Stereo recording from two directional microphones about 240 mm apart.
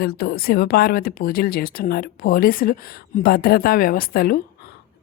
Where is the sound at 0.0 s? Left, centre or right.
Left.